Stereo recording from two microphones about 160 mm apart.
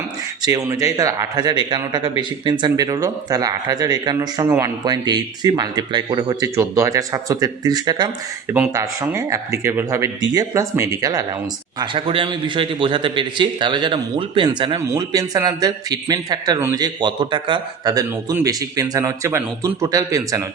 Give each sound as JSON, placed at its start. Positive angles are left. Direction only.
{"t": 0.4, "sound": "a man's voice", "side_deg": -20}
{"t": 4.4, "sound": "speech", "side_deg": -15}
{"t": 4.9, "sound": "a man's voice", "side_deg": -25}
{"t": 8.4, "sound": "a man's voice", "side_deg": -15}
{"t": 11.8, "sound": "a man's voice", "side_deg": -35}